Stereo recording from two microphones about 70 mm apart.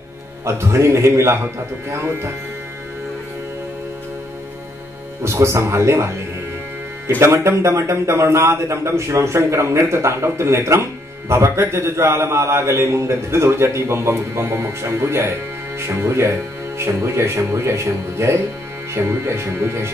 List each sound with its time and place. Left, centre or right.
0.5 s speech: right
5.2 s speech: right
7.2 s speech: right